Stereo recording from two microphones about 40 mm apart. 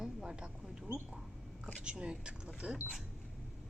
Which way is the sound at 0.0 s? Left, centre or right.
Centre.